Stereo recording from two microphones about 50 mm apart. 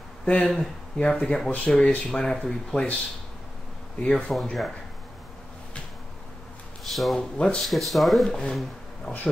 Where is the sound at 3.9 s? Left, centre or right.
Left.